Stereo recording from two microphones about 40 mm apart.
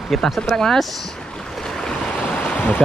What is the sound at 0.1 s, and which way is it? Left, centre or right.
Speech, centre.